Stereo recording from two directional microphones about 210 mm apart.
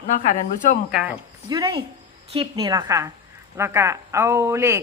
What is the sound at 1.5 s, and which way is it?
Speech, 20° right (ahead or behind).